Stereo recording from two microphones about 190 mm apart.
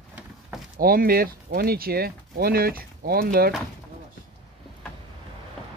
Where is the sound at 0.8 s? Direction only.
50° right (ahead or behind).